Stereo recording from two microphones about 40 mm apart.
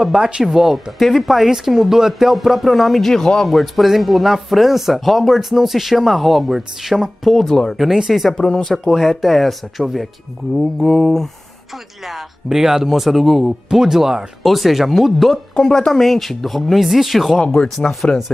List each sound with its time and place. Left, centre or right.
0.0 s speech: centre
3.4 s speech: centre
7.3 s mantra: centre
8.1 s speech: centre
8.4 s mantra: centre
8.7 s speech: centre
10.6 s mantra: centre
12.1 s speech: centre
13.7 s speech: centre
15.3 s mantra: centre
15.9 s speech: centre